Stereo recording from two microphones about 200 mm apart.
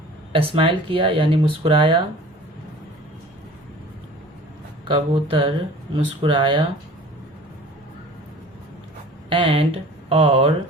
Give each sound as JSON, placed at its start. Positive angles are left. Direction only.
{"t": 0.3, "sound": "speech", "side_deg": -25}
{"t": 4.9, "sound": "speech", "side_deg": -25}
{"t": 9.3, "sound": "speech", "side_deg": -30}